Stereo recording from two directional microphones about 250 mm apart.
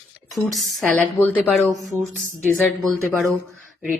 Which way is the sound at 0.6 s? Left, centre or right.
Centre.